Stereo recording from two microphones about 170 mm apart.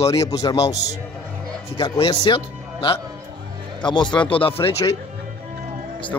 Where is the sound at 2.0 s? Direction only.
30° left (ahead or behind).